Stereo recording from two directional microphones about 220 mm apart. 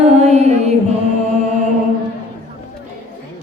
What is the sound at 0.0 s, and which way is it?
Music, 30° right (ahead or behind).